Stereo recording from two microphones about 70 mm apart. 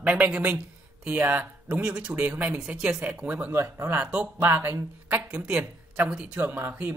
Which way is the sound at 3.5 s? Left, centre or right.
Right.